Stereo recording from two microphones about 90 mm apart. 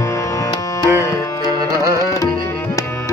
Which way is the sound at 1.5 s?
35° right (ahead or behind).